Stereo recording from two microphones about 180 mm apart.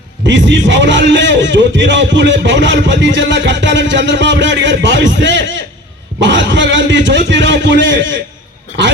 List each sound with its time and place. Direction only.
0.3 s a man's voice: 85° right